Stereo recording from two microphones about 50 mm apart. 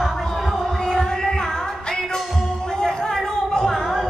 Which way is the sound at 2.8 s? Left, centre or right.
Centre.